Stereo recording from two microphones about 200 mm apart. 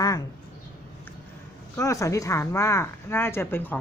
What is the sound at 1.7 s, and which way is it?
A woman's voice, 15° left (ahead or behind).